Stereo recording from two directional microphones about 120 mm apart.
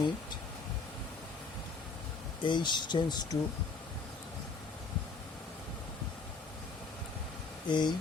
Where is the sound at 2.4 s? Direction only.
40° left (ahead or behind).